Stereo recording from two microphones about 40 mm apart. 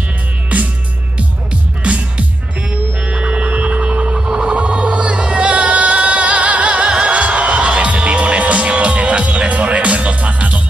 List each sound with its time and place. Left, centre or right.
0.5 s music: right
1.8 s music: right